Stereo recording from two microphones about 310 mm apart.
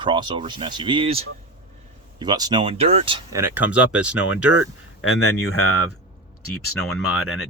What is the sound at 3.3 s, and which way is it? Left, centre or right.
Speech, centre.